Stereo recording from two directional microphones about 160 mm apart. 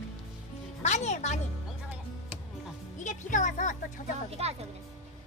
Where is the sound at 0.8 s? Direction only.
45° left (ahead or behind).